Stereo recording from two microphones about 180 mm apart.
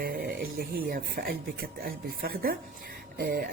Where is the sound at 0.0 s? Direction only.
55° right (ahead or behind).